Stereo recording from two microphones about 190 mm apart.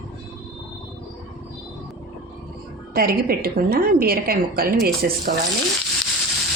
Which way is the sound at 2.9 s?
50° right (ahead or behind).